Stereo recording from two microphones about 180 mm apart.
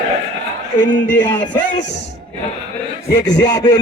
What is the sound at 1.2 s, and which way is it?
Speech, 25° left (ahead or behind).